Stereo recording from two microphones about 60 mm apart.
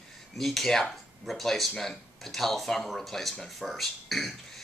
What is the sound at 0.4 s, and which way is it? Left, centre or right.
Speech, centre.